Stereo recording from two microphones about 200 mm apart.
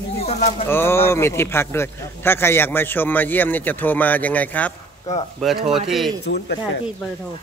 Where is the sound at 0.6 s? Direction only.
10° left (ahead or behind).